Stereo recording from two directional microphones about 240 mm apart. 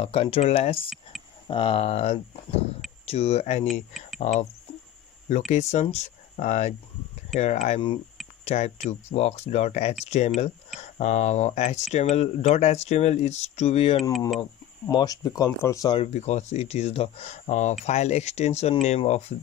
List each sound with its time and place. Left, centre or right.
0.0 s speech: left
1.1 s a sound: centre
1.5 s speech: left
5.5 s speech: left